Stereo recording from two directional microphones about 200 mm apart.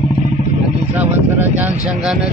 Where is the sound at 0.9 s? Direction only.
10° right (ahead or behind).